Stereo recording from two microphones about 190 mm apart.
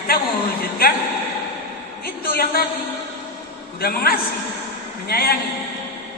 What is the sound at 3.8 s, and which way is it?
A man's voice, 55° left (ahead or behind).